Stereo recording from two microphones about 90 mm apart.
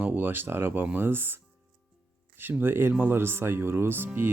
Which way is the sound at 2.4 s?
25° right (ahead or behind).